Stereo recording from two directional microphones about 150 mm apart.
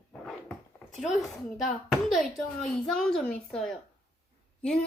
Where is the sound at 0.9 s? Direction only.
Centre (ahead or behind).